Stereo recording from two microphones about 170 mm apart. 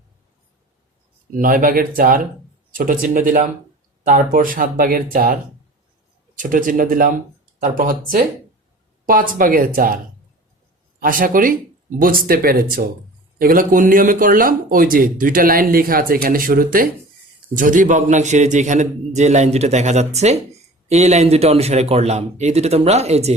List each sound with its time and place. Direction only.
1.3 s a man's voice: 55° right (ahead or behind)
9.0 s speech: 55° right (ahead or behind)
11.0 s a man's voice: 55° right (ahead or behind); by 23.3 s 40° right (ahead or behind)